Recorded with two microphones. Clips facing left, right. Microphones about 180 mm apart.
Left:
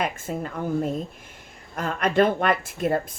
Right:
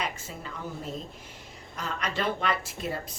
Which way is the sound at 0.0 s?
50° left (ahead or behind).